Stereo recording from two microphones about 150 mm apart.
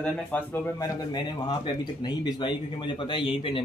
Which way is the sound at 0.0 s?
10° left (ahead or behind).